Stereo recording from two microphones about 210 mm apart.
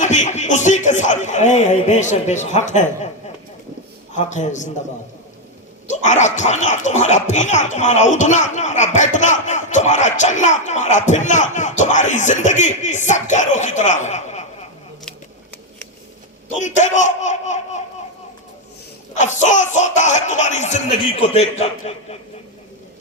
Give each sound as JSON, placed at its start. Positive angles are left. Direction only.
{"t": 0.0, "sound": "speech", "side_deg": 35}
{"t": 4.1, "sound": "speech", "side_deg": 35}
{"t": 5.9, "sound": "speech", "side_deg": 35}
{"t": 16.6, "sound": "speech", "side_deg": 35}
{"t": 19.2, "sound": "a man's voice", "side_deg": 35}